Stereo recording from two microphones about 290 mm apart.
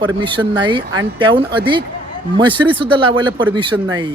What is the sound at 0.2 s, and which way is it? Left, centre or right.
Speech, centre.